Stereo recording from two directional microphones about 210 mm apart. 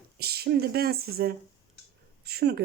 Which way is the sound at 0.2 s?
50° right (ahead or behind).